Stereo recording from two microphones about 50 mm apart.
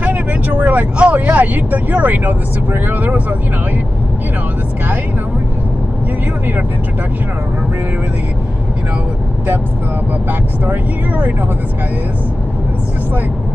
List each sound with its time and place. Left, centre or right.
0.0 s speech: right
10.6 s speech: right